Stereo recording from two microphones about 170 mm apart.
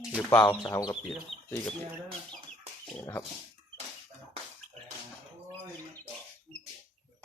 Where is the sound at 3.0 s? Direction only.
15° left (ahead or behind).